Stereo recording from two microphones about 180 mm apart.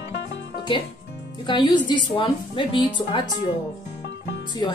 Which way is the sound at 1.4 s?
25° left (ahead or behind).